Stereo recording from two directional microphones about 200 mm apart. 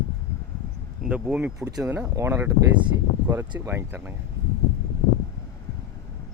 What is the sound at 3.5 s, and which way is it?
Speech, 15° right (ahead or behind).